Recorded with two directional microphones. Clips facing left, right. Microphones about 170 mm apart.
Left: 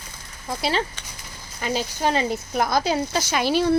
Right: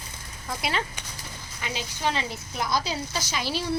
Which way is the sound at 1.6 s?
45° left (ahead or behind).